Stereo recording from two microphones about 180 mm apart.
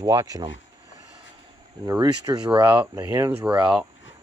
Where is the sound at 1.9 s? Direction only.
20° right (ahead or behind).